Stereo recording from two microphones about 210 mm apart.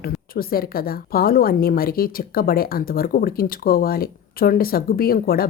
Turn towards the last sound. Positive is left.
turn(degrees=45)  # may be behind; listen again after turning